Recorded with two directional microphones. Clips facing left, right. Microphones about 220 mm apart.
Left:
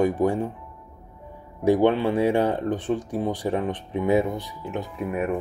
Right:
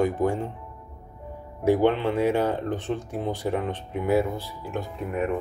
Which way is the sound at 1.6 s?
15° left (ahead or behind).